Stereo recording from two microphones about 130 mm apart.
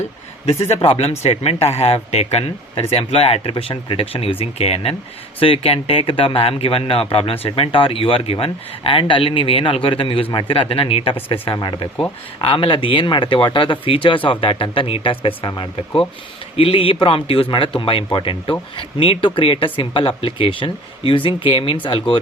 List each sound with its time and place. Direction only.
0.7 s a man's voice: 50° left (ahead or behind)